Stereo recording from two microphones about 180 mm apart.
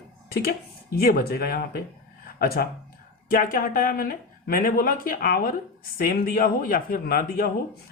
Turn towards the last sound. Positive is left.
turn(degrees=55)  # may be behind; listen again after turning